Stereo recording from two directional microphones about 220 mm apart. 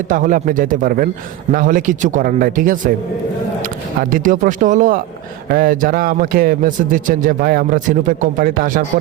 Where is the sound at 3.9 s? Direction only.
35° right (ahead or behind).